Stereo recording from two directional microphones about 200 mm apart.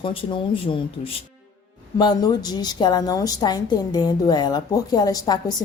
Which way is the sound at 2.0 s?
20° left (ahead or behind).